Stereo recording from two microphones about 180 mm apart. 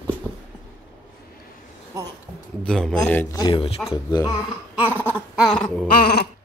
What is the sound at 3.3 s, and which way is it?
Speech, 25° left (ahead or behind).